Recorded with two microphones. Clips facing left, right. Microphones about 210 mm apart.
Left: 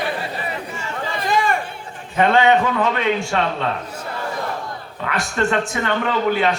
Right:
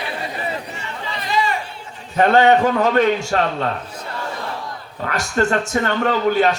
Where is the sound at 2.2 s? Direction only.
40° right (ahead or behind).